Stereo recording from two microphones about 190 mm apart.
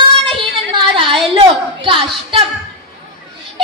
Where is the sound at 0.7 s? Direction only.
25° right (ahead or behind).